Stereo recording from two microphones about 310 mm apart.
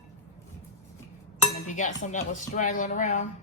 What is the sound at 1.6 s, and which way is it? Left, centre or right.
Dishes, left.